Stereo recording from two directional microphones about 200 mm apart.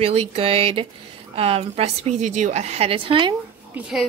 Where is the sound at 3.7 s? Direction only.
Centre (ahead or behind).